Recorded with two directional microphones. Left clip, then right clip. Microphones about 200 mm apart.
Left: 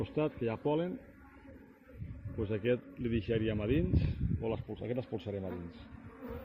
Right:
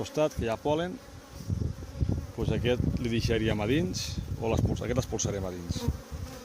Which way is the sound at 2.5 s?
25° right (ahead or behind).